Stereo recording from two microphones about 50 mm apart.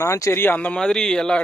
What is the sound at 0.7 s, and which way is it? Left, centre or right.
Speech, centre.